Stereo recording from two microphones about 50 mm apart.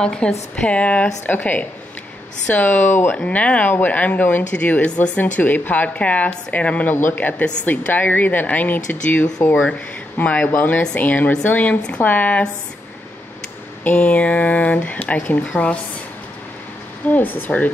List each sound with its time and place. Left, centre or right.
0.0 s speech: centre
1.2 s a woman's voice: left
3.3 s a woman's voice: left
5.2 s a woman's voice: left
13.8 s speech: left
17.1 s a woman's voice: left